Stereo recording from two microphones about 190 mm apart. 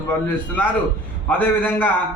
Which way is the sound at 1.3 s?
10° left (ahead or behind).